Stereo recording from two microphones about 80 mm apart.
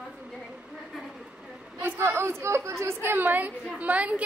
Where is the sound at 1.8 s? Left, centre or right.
Right.